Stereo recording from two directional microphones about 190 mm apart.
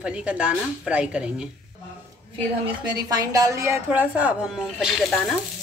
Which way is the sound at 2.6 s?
20° right (ahead or behind).